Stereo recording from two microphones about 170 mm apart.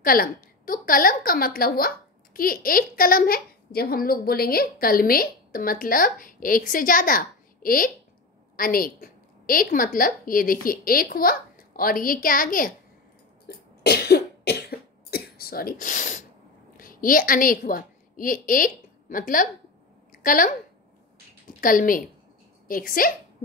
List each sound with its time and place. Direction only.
0.0 s a woman's voice: 60° left (ahead or behind)
13.5 s cough: 70° left (ahead or behind); by 16.3 s 45° left (ahead or behind)
16.7 s a woman's voice: 55° left (ahead or behind)
20.1 s a sound: 55° left (ahead or behind)
21.5 s a woman's voice: 55° left (ahead or behind)